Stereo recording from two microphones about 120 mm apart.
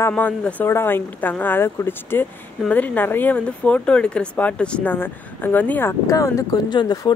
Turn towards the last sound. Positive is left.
turn(degrees=35)  # may be behind; listen again after turning